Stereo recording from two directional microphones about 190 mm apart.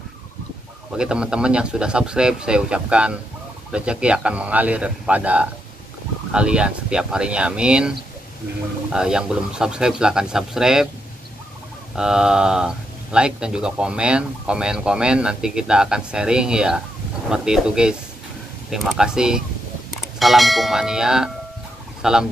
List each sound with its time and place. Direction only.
0.9 s speech: 5° right (ahead or behind)
8.9 s speech: 5° right (ahead or behind)
11.9 s speech: 5° right (ahead or behind)